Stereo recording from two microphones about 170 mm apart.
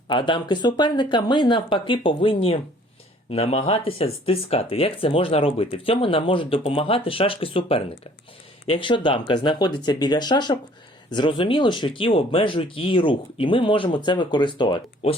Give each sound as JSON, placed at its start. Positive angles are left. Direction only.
{"t": 0.1, "sound": "speech", "side_deg": 30}